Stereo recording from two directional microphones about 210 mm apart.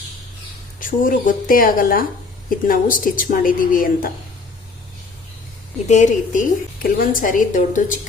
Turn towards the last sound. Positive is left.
turn(degrees=40)  # may be behind; listen again after turning